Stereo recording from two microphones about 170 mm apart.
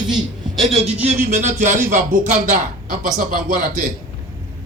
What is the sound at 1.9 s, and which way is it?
Speech, 45° right (ahead or behind).